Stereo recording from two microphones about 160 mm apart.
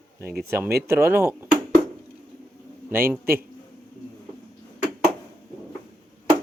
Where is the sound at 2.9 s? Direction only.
15° right (ahead or behind).